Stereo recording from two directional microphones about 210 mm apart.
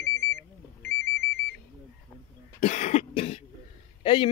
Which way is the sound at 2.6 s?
35° left (ahead or behind).